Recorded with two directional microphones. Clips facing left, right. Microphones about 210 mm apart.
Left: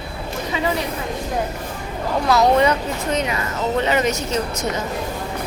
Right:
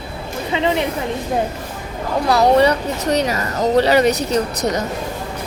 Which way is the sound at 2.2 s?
35° right (ahead or behind).